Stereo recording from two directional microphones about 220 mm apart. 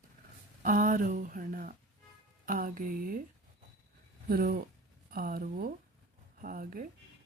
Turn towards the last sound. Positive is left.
turn(degrees=-40)  # may be behind; listen again after turning